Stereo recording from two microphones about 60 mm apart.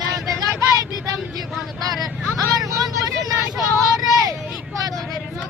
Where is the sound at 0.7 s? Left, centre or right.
Right.